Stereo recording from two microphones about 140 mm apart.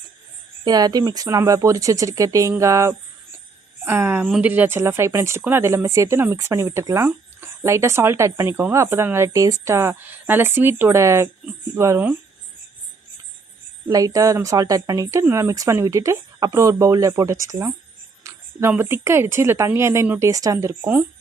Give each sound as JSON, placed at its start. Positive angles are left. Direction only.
{"t": 0.6, "sound": "a woman's voice", "side_deg": -30}
{"t": 13.8, "sound": "speech", "side_deg": -25}
{"t": 18.2, "sound": "a sound", "side_deg": -20}
{"t": 18.7, "sound": "speech", "side_deg": -15}